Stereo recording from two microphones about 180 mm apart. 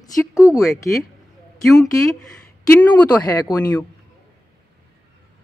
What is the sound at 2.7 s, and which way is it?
Speech, 10° left (ahead or behind).